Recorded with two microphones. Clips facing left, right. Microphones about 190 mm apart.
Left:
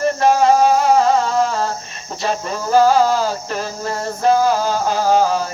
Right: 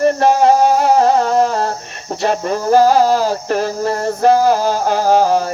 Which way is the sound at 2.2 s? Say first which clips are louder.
Right 5 dB; 60° right (ahead or behind).